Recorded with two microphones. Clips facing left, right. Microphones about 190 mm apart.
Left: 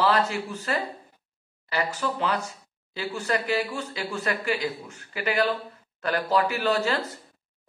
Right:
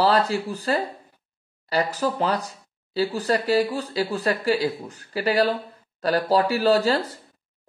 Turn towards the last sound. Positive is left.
turn(degrees=-35)  # may be behind; listen again after turning